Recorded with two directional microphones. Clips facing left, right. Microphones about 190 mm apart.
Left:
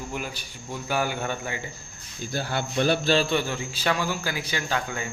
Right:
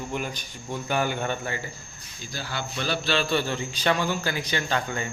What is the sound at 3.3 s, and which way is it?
A man's voice, 10° left (ahead or behind).